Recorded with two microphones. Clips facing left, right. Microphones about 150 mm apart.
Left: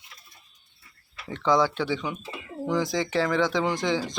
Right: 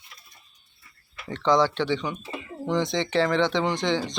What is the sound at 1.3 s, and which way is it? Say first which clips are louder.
Speech: right 1 dB; 5° left (ahead or behind).